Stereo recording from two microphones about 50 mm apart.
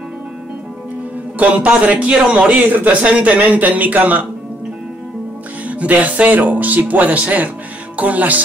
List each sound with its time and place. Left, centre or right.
1.4 s speech: right
2.6 s speech: right
3.0 s speech: right
5.7 s speech: right